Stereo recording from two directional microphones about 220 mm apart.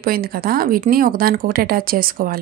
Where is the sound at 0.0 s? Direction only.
40° right (ahead or behind).